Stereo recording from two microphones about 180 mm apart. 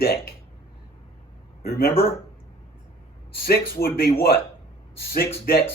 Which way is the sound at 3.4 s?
55° left (ahead or behind).